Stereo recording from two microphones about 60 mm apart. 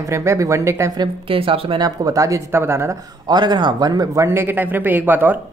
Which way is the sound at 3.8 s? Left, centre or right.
Right.